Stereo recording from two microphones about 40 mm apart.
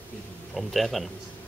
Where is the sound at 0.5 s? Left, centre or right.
Centre.